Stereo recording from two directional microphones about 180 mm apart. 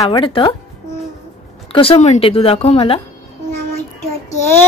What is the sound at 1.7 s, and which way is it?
Speech, 35° left (ahead or behind).